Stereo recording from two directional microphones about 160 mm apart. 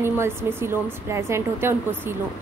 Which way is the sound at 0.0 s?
15° right (ahead or behind).